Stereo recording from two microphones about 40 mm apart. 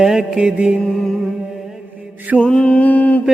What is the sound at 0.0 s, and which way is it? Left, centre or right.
Mantra, centre.